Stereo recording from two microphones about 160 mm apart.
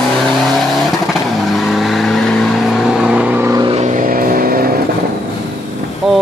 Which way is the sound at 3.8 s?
55° right (ahead or behind).